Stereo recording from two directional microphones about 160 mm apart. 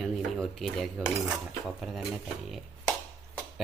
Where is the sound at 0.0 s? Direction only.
Centre (ahead or behind).